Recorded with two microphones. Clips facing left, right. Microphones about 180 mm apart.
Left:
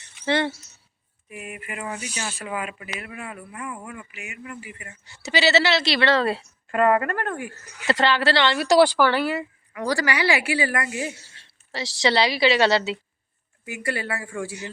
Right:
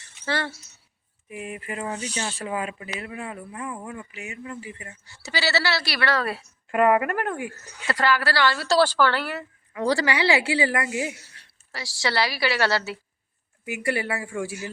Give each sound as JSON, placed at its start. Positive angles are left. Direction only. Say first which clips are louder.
{"t": 0.0, "sound": "cricket", "louder": "left 5 dB", "side_deg": 20}
{"t": 1.3, "sound": "speech", "louder": "right 3 dB", "side_deg": -25}
{"t": 1.9, "sound": "speech", "louder": "right 2 dB", "side_deg": 10}
{"t": 2.4, "sound": "speech", "louder": "right 1 dB", "side_deg": -30}
{"t": 5.0, "sound": "a woman's voice", "louder": "left 6 dB", "side_deg": 20}
{"t": 6.7, "sound": "speech", "louder": "even", "side_deg": -15}
{"t": 7.9, "sound": "speech", "louder": "left 3 dB", "side_deg": 25}
{"t": 9.7, "sound": "speech", "louder": "right 1 dB", "side_deg": -25}
{"t": 11.1, "sound": "a woman's voice", "louder": "even", "side_deg": 25}
{"t": 13.7, "sound": "speech", "louder": "right 2 dB", "side_deg": -20}